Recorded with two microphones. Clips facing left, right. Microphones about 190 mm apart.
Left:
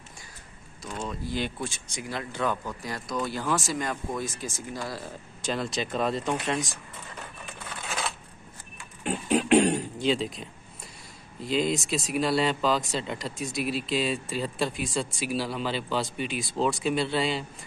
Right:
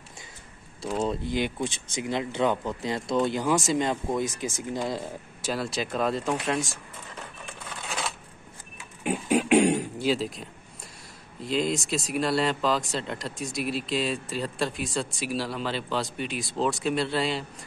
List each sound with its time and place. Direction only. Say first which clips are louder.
1.2 s speech: right 3 dB; 15° right (ahead or behind)
5.4 s speech: even; 5° right (ahead or behind)
7.7 s coin: even; centre (ahead or behind)
9.0 s throat clearing: right 1 dB; 10° right (ahead or behind)
11.4 s speech: even; centre (ahead or behind)